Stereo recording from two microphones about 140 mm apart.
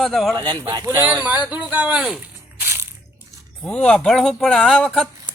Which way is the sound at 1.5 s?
10° right (ahead or behind).